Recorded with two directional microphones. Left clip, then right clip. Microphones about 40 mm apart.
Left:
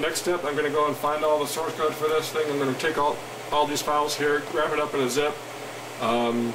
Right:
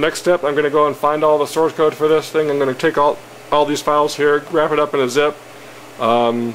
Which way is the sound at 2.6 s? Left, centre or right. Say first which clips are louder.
Right 9 dB; right.